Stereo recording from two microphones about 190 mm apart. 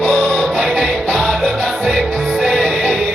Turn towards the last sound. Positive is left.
turn(degrees=-5)  # may be behind; listen again after turning